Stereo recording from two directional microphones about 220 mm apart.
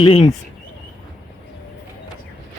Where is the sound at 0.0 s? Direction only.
25° left (ahead or behind).